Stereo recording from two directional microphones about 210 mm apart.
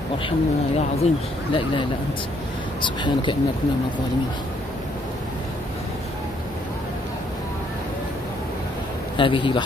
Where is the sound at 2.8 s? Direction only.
20° left (ahead or behind).